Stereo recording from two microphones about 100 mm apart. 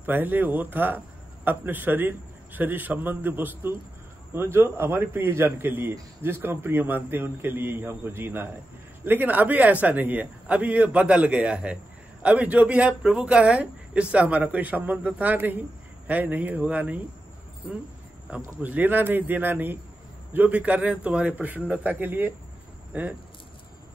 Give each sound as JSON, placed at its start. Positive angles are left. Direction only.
{"t": 0.0, "sound": "a man's voice", "side_deg": -20}
{"t": 18.3, "sound": "a man's voice", "side_deg": -15}